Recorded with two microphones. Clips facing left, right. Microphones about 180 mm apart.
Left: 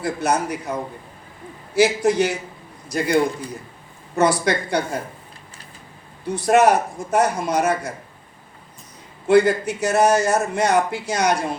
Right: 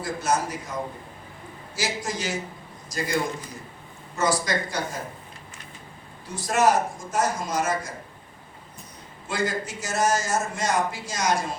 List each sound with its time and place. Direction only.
0.0 s a man's voice: 65° left (ahead or behind)
4.1 s a man's voice: 60° left (ahead or behind)
6.2 s a man's voice: 60° left (ahead or behind)
9.2 s a man's voice: 65° left (ahead or behind)